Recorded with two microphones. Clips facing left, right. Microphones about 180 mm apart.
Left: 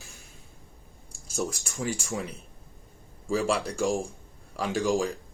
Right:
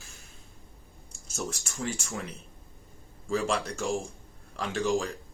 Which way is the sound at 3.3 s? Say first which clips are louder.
Left 2 dB; 10° left (ahead or behind).